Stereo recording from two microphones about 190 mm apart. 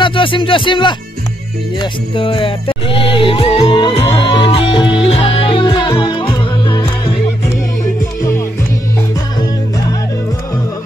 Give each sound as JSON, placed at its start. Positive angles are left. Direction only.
{"t": 0.0, "sound": "speech", "side_deg": 25}
{"t": 1.8, "sound": "music", "side_deg": 25}